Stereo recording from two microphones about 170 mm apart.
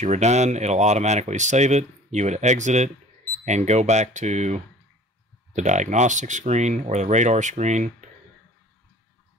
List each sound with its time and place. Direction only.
0.0 s speech: 45° right (ahead or behind)